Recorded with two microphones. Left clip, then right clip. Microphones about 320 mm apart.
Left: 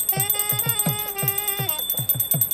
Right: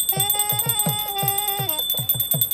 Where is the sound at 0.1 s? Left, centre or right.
Right.